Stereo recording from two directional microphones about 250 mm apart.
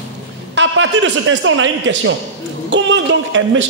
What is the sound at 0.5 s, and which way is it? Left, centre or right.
A man's voice, right.